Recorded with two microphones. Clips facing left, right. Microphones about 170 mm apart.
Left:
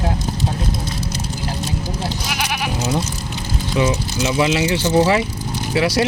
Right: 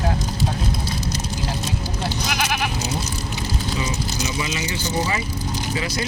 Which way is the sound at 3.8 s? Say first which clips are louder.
Left 7 dB; 70° left (ahead or behind).